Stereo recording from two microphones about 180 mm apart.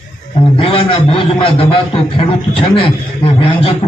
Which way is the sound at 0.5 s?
30° left (ahead or behind).